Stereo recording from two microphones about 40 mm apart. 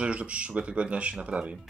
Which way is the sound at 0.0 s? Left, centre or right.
Right.